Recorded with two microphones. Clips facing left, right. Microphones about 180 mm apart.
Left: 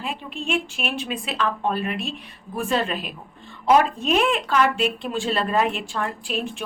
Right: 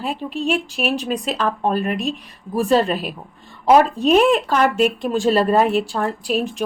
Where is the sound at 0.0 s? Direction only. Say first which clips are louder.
Right 7 dB; 40° right (ahead or behind).